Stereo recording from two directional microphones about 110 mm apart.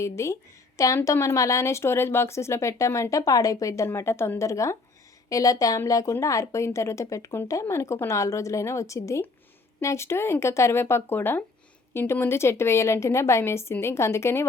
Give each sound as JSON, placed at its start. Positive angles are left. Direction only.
{"t": 0.0, "sound": "a woman's voice", "side_deg": 25}